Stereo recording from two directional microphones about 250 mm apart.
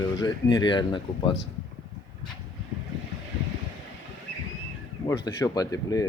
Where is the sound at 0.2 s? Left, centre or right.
Centre.